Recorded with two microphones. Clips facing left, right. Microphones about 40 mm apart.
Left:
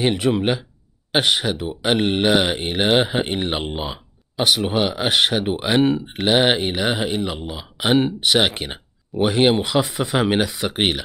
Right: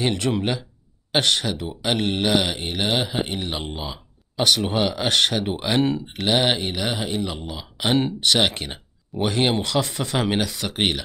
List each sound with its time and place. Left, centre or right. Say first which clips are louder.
0.0 s speech: left 4 dB; centre
4.4 s speech: left 2 dB; centre